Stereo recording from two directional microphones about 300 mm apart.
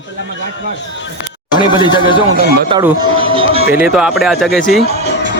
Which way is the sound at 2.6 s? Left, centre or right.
Centre.